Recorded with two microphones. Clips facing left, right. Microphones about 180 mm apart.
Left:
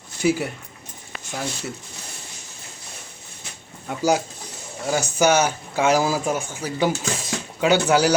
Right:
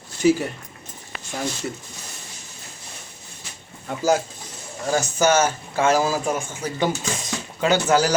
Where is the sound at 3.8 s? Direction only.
10° left (ahead or behind).